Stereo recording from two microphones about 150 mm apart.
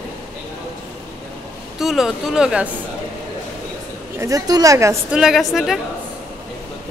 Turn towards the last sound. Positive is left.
turn(degrees=0)  # may be behind; listen again after turning